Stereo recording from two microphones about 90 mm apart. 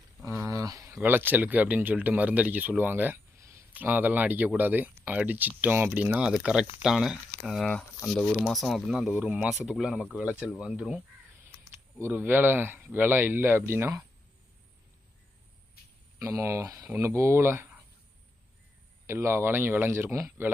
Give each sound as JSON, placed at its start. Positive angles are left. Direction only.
{"t": 0.3, "sound": "a sound", "side_deg": -30}
{"t": 1.0, "sound": "speech", "side_deg": -20}
{"t": 3.3, "sound": "a sound", "side_deg": -35}
{"t": 3.7, "sound": "speech", "side_deg": -20}
{"t": 7.7, "sound": "speech", "side_deg": 10}
{"t": 11.9, "sound": "speech", "side_deg": -25}
{"t": 16.1, "sound": "speech", "side_deg": -30}
{"t": 19.0, "sound": "speech", "side_deg": -30}